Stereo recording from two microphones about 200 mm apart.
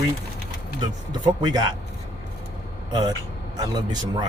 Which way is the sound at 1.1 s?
20° right (ahead or behind).